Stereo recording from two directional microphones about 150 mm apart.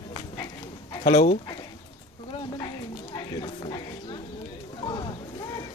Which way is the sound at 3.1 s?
35° left (ahead or behind).